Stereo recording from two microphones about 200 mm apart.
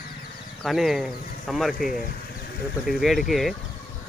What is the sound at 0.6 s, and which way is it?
Speech, centre (ahead or behind).